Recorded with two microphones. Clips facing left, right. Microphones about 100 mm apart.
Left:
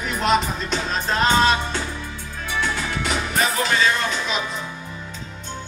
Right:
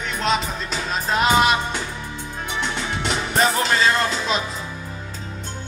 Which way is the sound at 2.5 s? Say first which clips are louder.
Left 2 dB; 25° right (ahead or behind).